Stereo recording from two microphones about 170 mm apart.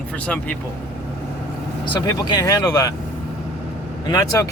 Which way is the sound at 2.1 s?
20° left (ahead or behind).